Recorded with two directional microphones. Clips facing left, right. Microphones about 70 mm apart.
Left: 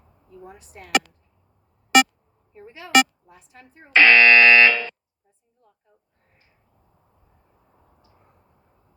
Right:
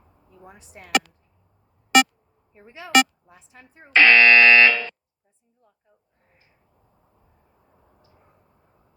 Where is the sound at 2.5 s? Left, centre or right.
Centre.